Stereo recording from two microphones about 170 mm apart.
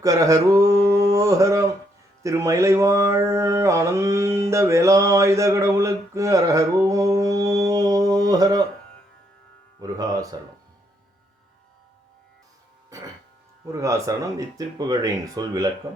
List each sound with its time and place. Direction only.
0.0 s mantra: 20° right (ahead or behind)
9.8 s speech: 20° right (ahead or behind)
12.9 s music: 20° right (ahead or behind)
13.7 s speech: 20° right (ahead or behind)